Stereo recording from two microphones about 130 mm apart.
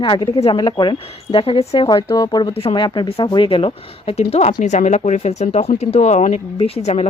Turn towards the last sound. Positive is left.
turn(degrees=55)  # may be behind; listen again after turning